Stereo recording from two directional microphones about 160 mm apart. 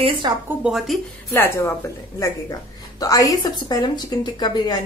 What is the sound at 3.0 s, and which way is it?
A woman's voice, 20° left (ahead or behind).